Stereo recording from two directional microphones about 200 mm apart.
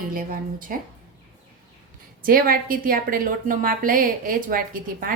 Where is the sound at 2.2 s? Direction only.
45° right (ahead or behind).